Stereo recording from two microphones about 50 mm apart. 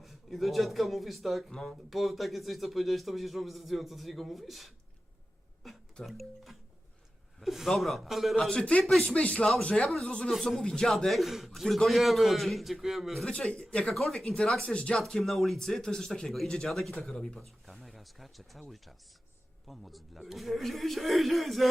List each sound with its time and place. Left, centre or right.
0.0 s speech: centre
1.5 s a man's voice: centre
8.4 s speech: centre
8.8 s speech: centre
9.0 s speech: left
10.2 s speech: centre
13.2 s speech: centre
13.6 s speech: left
13.9 s speech: centre
14.6 s speech: centre
14.9 s speech: centre
17.4 s speech: centre
19.6 s speech: centre